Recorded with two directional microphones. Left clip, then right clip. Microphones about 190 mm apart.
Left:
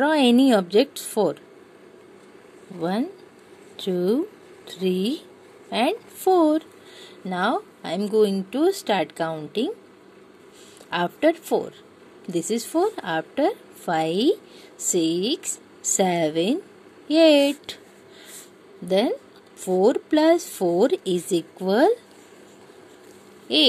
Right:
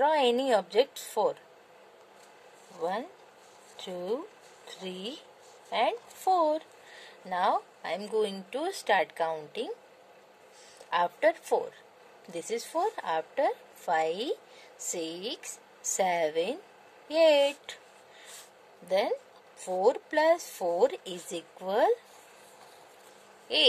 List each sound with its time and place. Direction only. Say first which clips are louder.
0.0 s a woman's voice: left 6 dB; 20° left (ahead or behind)
2.8 s a woman's voice: left 6 dB; 20° left (ahead or behind)
10.9 s a woman's voice: left 5 dB; 15° left (ahead or behind)
18.9 s a woman's voice: left 6 dB; 20° left (ahead or behind)
23.5 s a woman's voice: left 7 dB; 15° left (ahead or behind)